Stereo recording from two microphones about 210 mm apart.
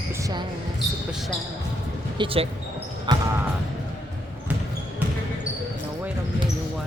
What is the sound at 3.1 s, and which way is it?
Basketball bounce, 20° right (ahead or behind).